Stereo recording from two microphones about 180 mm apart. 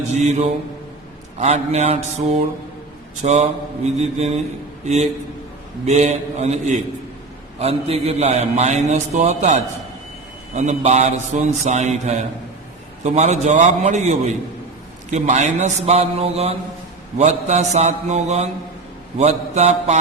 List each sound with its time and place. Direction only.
0.1 s a man's voice: 40° right (ahead or behind)
3.2 s a man's voice: 40° right (ahead or behind)
5.8 s a man's voice: 40° right (ahead or behind)